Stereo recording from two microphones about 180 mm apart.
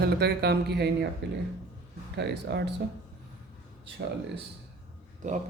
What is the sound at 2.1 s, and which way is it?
Speech, 65° right (ahead or behind).